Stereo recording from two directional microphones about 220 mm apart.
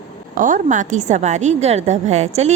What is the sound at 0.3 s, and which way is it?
A woman's voice, 35° right (ahead or behind).